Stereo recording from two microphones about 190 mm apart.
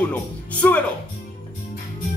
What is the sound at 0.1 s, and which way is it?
Speech, 10° left (ahead or behind).